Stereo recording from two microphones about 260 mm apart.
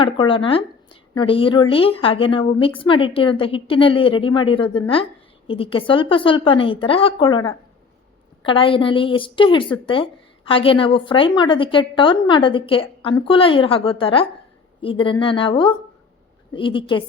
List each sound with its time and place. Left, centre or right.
0.0 s a woman's voice: centre